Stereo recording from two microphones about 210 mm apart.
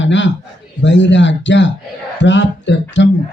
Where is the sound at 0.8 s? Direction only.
60° left (ahead or behind).